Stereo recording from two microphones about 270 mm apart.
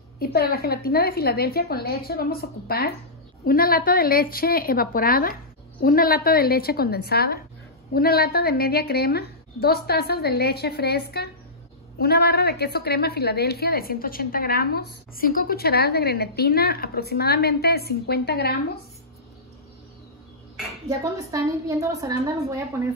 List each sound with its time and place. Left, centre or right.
0.2 s a woman's voice: left
21.0 s a woman's voice: centre